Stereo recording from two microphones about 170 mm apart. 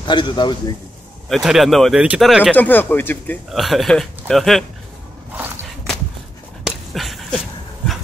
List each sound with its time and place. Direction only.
0.0 s a man's voice: 25° left (ahead or behind)
1.3 s speech: centre (ahead or behind)
2.5 s speech: 10° left (ahead or behind)
3.4 s speech: centre (ahead or behind)
6.6 s dog: centre (ahead or behind)